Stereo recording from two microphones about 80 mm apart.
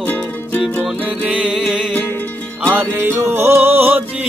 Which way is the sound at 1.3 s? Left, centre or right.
Centre.